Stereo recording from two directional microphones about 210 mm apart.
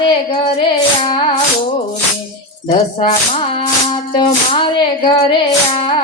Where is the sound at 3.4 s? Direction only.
25° left (ahead or behind).